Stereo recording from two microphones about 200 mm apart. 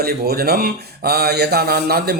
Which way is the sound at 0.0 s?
50° right (ahead or behind).